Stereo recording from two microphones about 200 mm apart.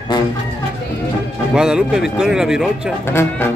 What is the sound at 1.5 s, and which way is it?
Speech, 5° right (ahead or behind).